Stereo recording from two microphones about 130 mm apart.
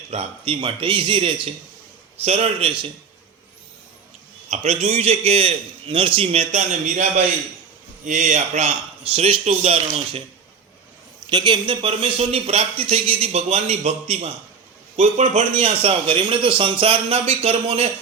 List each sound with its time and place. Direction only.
0.1 s speech: 50° right (ahead or behind)
4.4 s a man's voice: 65° right (ahead or behind)
9.1 s speech: 50° right (ahead or behind)
11.3 s a man's voice: 35° right (ahead or behind); by 15.4 s 70° right (ahead or behind)
15.6 s speech: 45° right (ahead or behind)